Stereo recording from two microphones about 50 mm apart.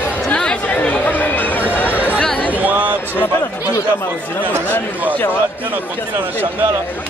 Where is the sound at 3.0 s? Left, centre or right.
Left.